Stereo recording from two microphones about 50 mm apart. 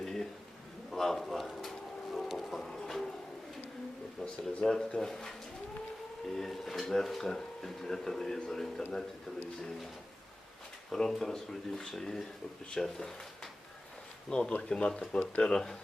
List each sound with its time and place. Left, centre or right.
0.0 s a sound: centre
4.2 s speech: centre
6.3 s speech: centre
10.9 s speech: centre